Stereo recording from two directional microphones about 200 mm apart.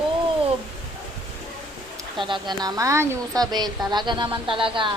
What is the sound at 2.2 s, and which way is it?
A woman's voice, 20° right (ahead or behind).